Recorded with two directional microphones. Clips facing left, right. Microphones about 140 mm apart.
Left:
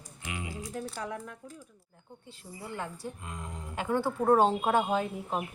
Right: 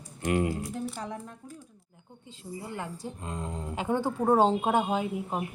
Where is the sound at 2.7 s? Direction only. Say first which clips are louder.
Left 1 dB; 20° right (ahead or behind).